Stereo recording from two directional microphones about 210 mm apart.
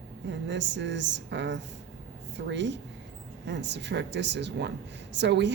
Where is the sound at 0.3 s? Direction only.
60° right (ahead or behind).